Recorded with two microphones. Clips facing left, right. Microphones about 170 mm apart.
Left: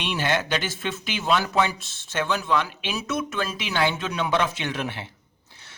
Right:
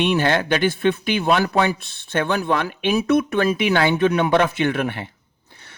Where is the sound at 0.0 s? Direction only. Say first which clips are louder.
Right 7 dB; 50° right (ahead or behind).